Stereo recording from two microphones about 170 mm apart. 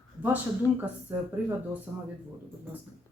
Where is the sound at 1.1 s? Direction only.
10° right (ahead or behind).